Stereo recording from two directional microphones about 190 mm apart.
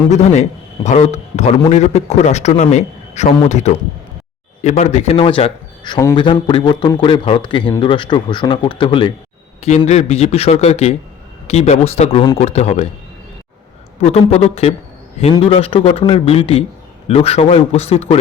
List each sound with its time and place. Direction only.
0.1 s a man's voice: 35° left (ahead or behind)
9.6 s a man's voice: 35° left (ahead or behind)
14.0 s a man's voice: 35° left (ahead or behind)